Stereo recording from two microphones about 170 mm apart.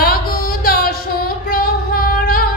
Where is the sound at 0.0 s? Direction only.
60° left (ahead or behind).